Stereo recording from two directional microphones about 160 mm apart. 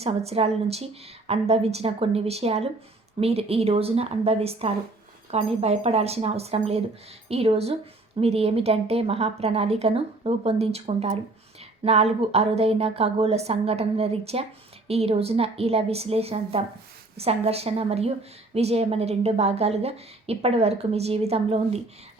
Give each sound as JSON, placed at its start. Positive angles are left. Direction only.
{"t": 0.0, "sound": "a woman's voice", "side_deg": -40}